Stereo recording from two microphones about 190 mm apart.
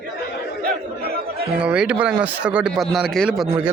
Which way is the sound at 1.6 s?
5° right (ahead or behind).